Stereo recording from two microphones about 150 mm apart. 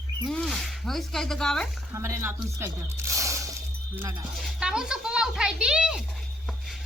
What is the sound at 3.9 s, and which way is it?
Music, 15° right (ahead or behind).